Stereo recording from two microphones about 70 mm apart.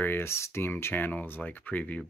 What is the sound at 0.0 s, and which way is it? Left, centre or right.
Speech, left.